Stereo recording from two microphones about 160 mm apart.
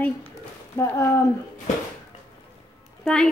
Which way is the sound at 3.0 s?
5° left (ahead or behind).